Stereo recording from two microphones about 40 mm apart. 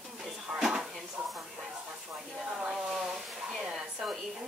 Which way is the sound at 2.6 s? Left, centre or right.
Centre.